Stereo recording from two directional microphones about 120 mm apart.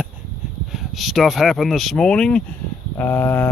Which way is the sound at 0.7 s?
Centre (ahead or behind).